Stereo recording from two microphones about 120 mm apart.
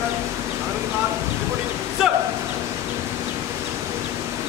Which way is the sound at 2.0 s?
5° right (ahead or behind).